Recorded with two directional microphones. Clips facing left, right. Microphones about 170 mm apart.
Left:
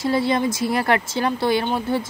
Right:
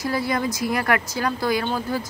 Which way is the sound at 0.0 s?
25° left (ahead or behind).